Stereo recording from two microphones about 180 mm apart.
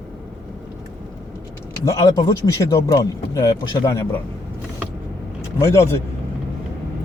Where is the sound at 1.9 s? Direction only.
20° left (ahead or behind).